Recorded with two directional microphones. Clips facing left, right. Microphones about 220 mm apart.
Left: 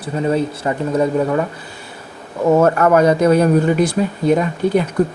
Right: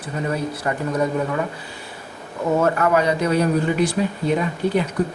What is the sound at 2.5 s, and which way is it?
Speech, 45° left (ahead or behind).